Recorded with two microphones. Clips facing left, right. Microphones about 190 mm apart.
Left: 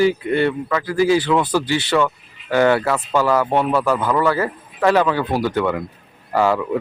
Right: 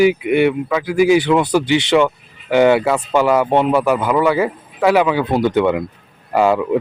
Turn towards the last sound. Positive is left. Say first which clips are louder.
# right 3 dB
turn(degrees=-20)  # may be behind; listen again after turning